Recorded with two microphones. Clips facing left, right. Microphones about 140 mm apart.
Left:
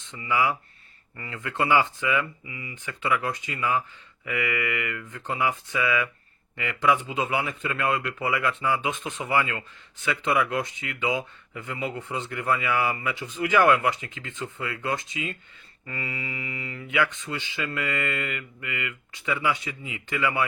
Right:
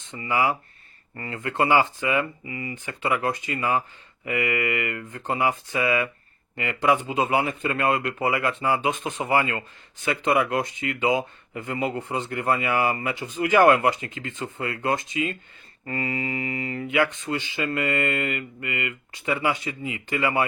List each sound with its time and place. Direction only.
0.1 s speech: 40° right (ahead or behind)
7.2 s speech: 40° right (ahead or behind)